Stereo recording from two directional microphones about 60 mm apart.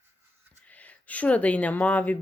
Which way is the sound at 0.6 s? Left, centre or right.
Left.